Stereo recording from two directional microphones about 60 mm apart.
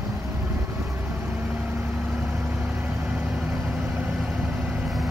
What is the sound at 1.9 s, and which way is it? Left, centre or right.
Vehicle, centre.